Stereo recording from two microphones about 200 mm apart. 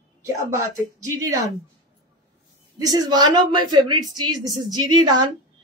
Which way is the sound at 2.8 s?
20° right (ahead or behind).